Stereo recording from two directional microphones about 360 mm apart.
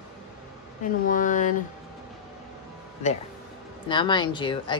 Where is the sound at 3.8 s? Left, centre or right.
Centre.